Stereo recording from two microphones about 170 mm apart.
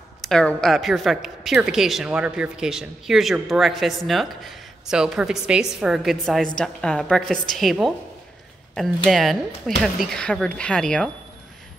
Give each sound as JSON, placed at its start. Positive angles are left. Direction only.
{"t": 0.2, "sound": "speech", "side_deg": 5}